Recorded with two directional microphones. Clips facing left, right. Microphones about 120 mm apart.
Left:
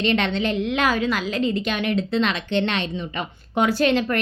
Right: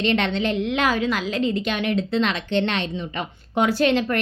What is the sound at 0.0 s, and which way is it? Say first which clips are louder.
A woman's voice: even; 30° right (ahead or behind).